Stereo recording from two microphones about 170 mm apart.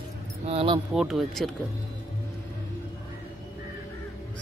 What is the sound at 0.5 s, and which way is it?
Keys jangling, 35° right (ahead or behind).